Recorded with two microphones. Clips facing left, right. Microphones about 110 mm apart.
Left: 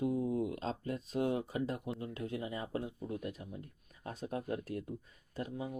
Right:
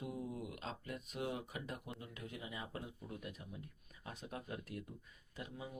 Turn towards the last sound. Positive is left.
turn(degrees=35)  # may be behind; listen again after turning